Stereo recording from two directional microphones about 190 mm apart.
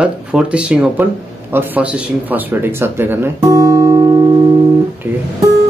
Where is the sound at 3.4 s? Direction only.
20° right (ahead or behind).